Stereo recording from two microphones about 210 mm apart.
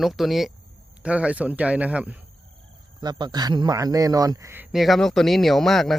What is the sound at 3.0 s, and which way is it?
Speech, 20° right (ahead or behind).